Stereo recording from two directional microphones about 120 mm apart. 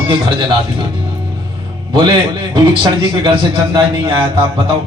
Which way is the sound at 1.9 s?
40° right (ahead or behind).